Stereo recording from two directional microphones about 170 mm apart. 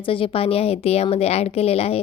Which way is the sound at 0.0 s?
30° left (ahead or behind).